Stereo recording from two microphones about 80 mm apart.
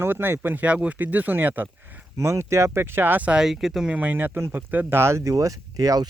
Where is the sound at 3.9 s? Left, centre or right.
Right.